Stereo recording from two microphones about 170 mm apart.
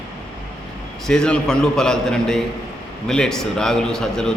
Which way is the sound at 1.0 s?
5° left (ahead or behind).